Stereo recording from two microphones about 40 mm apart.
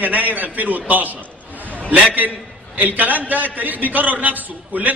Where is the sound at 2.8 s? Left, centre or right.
Right.